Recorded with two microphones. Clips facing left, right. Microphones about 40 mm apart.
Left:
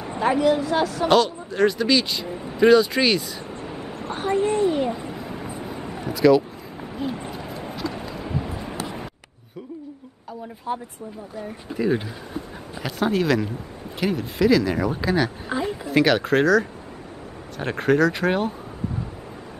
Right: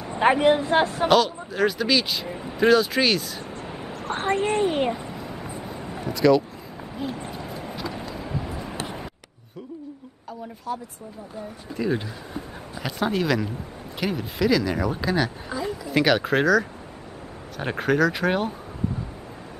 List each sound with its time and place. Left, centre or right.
0.2 s speech: right
1.0 s speech: centre
3.6 s a sound: centre
4.1 s speech: right
5.0 s vehicle: centre
5.9 s a sound: centre
8.0 s vehicle: centre
10.7 s speech: left
11.7 s speech: centre